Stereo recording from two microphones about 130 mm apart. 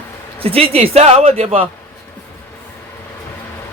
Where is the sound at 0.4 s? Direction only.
50° right (ahead or behind).